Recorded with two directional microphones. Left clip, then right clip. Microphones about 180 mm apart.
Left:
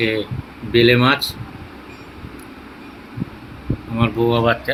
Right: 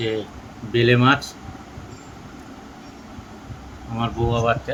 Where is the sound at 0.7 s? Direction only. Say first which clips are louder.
Left 3 dB; 25° left (ahead or behind).